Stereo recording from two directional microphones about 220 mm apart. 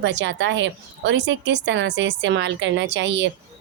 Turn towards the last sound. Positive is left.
turn(degrees=-55)  # may be behind; listen again after turning